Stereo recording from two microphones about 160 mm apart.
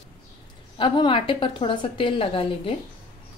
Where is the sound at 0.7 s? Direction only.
30° left (ahead or behind).